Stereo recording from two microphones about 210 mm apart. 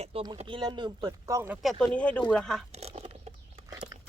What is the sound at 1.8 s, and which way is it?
Speech, 5° left (ahead or behind).